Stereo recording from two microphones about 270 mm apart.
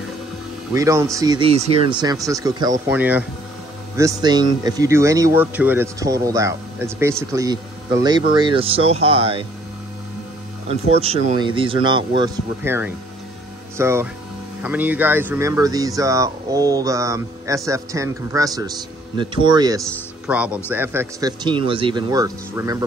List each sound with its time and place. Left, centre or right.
0.7 s speech: centre
10.7 s speech: right
20.2 s speech: centre